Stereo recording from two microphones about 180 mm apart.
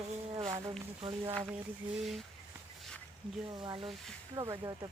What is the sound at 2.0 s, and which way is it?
Speech, centre (ahead or behind).